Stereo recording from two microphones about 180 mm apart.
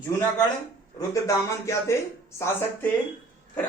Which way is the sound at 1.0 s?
15° left (ahead or behind).